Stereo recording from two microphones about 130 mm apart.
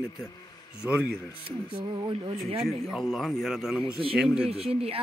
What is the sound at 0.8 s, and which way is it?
Speech, 10° right (ahead or behind).